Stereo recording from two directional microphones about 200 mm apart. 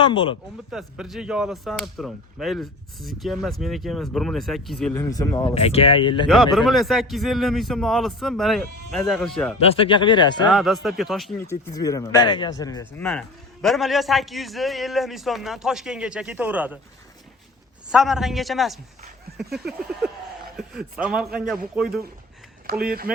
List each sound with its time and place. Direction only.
0.0 s speech: 25° left (ahead or behind)
0.7 s speech: centre (ahead or behind)
4.9 s speech: 15° left (ahead or behind)
5.5 s speech: 30° left (ahead or behind)
6.2 s speech: centre (ahead or behind)
9.6 s speech: 30° left (ahead or behind)
10.5 s speech: centre (ahead or behind)
11.3 s speech: 15° left (ahead or behind)
13.0 s speech: 5° left (ahead or behind)
17.9 s speech: centre (ahead or behind)
23.1 s speech: 5° right (ahead or behind)